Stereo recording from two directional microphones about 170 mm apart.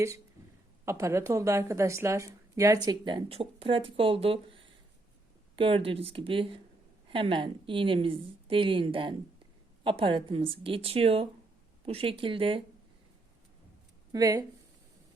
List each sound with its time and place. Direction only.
0.9 s a woman's voice: 15° right (ahead or behind)
14.1 s a woman's voice: 20° right (ahead or behind)